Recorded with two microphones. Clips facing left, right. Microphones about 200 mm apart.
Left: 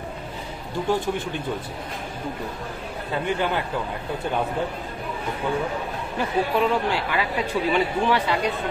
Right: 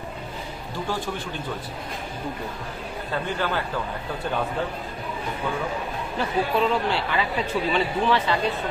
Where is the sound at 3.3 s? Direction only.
20° left (ahead or behind).